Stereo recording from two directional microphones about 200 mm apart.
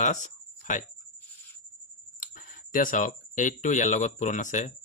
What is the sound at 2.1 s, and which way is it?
Speech, 45° left (ahead or behind).